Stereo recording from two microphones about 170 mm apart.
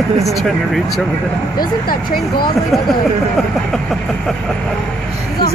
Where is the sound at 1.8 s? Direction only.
60° left (ahead or behind).